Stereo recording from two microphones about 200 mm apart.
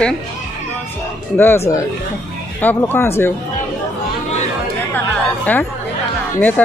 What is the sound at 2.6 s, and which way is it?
Speech, 10° left (ahead or behind).